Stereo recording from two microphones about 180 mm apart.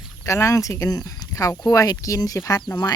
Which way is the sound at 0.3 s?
15° left (ahead or behind).